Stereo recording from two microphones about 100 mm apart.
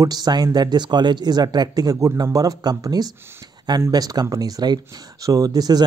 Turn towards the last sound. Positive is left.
turn(degrees=-40)  # may be behind; listen again after turning